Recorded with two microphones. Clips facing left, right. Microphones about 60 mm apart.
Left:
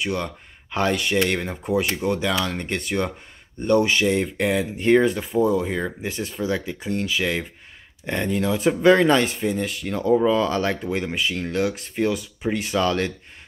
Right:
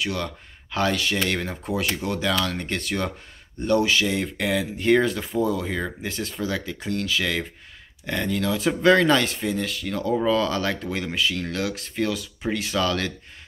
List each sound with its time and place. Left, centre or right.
0.0 s speech: left
1.5 s speech: centre
2.0 s speech: left